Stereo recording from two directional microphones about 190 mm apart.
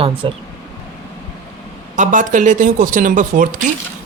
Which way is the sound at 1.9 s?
40° right (ahead or behind).